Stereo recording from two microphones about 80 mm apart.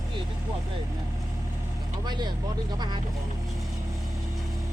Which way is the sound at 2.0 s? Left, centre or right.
Right.